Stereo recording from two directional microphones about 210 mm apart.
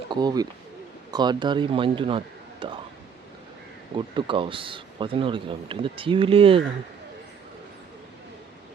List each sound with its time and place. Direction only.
0.1 s speech: 20° right (ahead or behind)
3.9 s speech: 25° right (ahead or behind)